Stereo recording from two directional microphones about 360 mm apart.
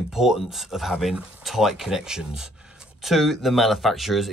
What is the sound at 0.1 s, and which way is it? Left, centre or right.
Speech, centre.